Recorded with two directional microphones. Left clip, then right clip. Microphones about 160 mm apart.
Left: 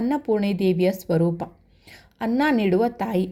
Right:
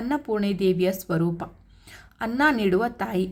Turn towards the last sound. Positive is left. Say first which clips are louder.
# left 3 dB
turn(degrees=20)  # may be behind; listen again after turning